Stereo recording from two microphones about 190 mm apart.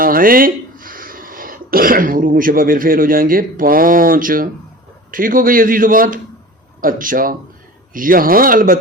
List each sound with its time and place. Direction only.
0.0 s a man's voice: 50° right (ahead or behind)